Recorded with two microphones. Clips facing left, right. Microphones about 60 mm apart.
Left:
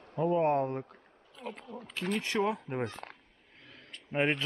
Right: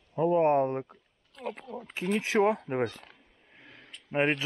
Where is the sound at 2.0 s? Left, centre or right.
Centre.